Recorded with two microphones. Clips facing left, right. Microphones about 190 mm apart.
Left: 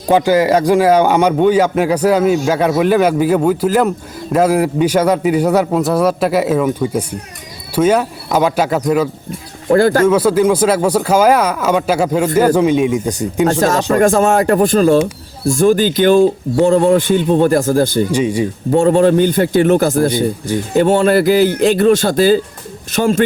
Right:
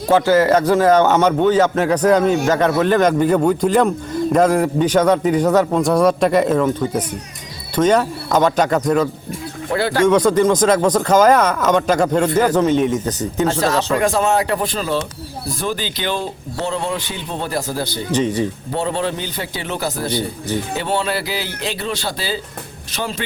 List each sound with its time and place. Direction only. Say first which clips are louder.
0.1 s speech: left 2 dB; 15° left (ahead or behind)
9.7 s speech: left 6 dB; 45° left (ahead or behind)
10.1 s speech: left 2 dB; 5° left (ahead or behind)
13.5 s speech: left 4 dB; 45° left (ahead or behind)
18.1 s speech: left 3 dB; 10° left (ahead or behind)
18.7 s speech: left 16 dB; 50° left (ahead or behind)